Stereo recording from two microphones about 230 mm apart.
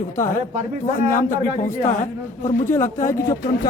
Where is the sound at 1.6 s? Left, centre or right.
Left.